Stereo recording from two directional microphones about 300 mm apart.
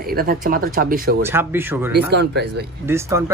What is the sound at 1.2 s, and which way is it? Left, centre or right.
Speech, centre.